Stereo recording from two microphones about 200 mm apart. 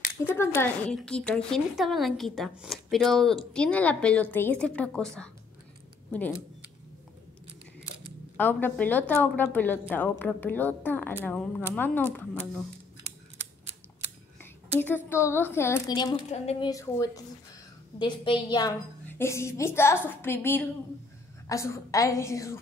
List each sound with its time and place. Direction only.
0.2 s a woman's voice: 10° left (ahead or behind)
8.4 s a woman's voice: 10° left (ahead or behind)
14.8 s a woman's voice: 10° left (ahead or behind)